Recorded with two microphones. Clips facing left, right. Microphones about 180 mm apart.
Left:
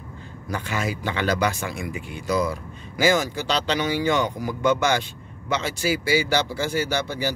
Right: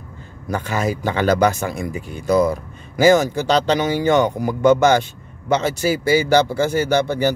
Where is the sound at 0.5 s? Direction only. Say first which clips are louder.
Right 6 dB; 45° right (ahead or behind).